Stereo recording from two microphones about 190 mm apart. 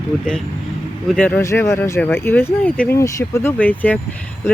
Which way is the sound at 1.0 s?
5° left (ahead or behind).